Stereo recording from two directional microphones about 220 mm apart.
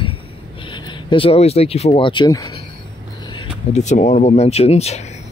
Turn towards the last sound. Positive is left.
turn(degrees=30)  # may be behind; listen again after turning